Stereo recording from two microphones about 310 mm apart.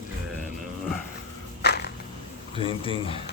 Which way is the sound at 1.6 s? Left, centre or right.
Left.